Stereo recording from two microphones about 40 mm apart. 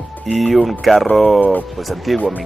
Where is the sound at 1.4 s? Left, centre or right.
Left.